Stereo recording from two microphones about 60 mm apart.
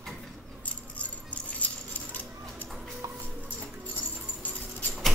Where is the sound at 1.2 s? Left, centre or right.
Left.